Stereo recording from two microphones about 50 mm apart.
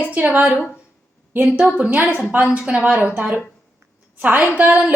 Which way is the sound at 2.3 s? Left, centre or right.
Right.